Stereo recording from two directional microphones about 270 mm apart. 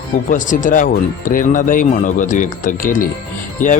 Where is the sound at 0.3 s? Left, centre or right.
Left.